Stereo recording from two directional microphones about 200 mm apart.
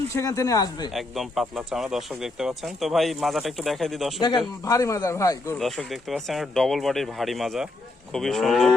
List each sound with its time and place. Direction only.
0.1 s speech: 15° left (ahead or behind)
0.9 s speech: centre (ahead or behind)
4.2 s speech: 20° left (ahead or behind)
5.5 s speech: centre (ahead or behind)